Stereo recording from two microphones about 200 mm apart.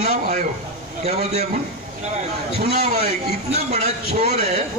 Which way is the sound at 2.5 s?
30° right (ahead or behind).